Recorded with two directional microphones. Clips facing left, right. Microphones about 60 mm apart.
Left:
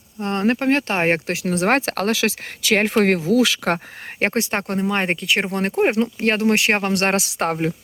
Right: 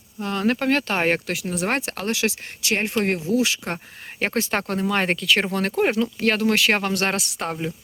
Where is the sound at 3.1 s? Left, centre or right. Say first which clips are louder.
Left 5 dB; left.